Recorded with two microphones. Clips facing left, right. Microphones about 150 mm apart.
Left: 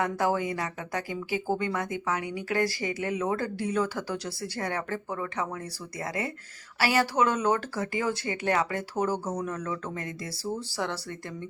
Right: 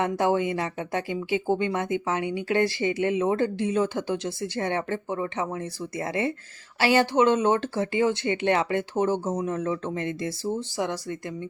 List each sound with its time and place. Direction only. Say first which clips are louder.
0.0 s speech: right 4 dB; 25° right (ahead or behind)